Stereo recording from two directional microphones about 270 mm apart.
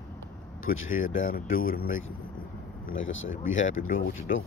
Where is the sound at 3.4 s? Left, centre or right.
Left.